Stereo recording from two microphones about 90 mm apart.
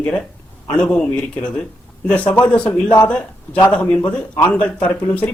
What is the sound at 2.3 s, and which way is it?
Speech, 20° left (ahead or behind).